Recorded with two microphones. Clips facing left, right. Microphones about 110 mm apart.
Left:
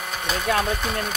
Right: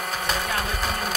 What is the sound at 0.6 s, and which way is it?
Speech, centre (ahead or behind).